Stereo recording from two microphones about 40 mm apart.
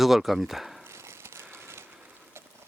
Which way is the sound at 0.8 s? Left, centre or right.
Right.